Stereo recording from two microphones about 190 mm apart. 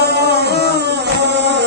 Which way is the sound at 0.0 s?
60° right (ahead or behind).